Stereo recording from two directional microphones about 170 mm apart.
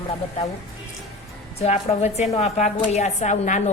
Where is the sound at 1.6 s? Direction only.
40° left (ahead or behind).